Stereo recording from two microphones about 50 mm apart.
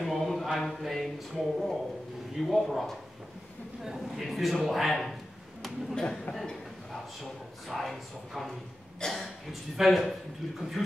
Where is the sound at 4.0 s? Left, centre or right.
Centre.